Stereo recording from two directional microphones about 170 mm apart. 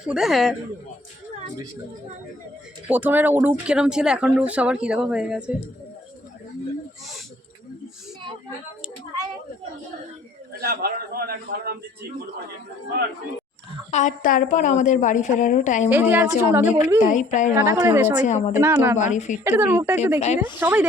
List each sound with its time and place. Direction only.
0.0 s speech: 5° right (ahead or behind)
2.8 s speech: 10° right (ahead or behind)
10.6 s a man's voice: 65° right (ahead or behind)
13.9 s a woman's voice: 50° left (ahead or behind)
15.9 s a woman's voice: 10° right (ahead or behind)
17.0 s a woman's voice: 45° left (ahead or behind)
17.5 s a woman's voice: 15° right (ahead or behind)
18.2 s a woman's voice: 45° left (ahead or behind)
18.5 s a woman's voice: 15° right (ahead or behind)
18.9 s a woman's voice: 45° left (ahead or behind)
19.5 s a woman's voice: 15° right (ahead or behind)
20.1 s speech: 40° left (ahead or behind)
20.6 s a woman's voice: 10° right (ahead or behind)